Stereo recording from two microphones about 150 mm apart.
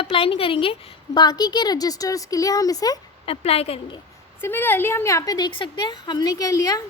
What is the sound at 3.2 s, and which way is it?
Speech, 40° left (ahead or behind).